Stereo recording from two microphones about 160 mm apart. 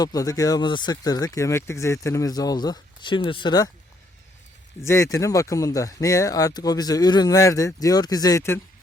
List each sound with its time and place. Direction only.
0.0 s speech: 20° left (ahead or behind)
4.8 s speech: 20° left (ahead or behind)